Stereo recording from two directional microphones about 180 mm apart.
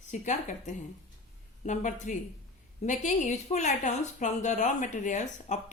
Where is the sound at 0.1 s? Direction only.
40° left (ahead or behind).